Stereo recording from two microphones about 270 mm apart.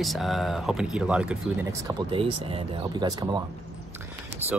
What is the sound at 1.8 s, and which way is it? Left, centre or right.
Speech, centre.